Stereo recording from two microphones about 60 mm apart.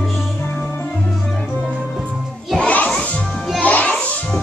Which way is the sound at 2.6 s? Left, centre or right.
Left.